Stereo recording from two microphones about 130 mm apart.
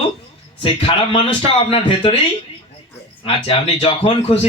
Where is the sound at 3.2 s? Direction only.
45° left (ahead or behind).